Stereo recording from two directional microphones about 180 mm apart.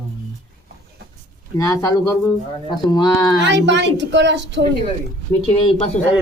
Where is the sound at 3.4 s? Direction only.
75° right (ahead or behind).